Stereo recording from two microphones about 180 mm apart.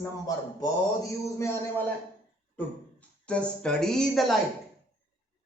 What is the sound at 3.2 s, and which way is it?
Speech, 5° left (ahead or behind).